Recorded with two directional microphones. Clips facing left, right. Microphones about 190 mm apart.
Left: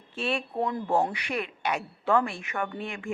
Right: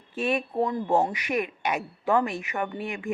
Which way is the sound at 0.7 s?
20° right (ahead or behind).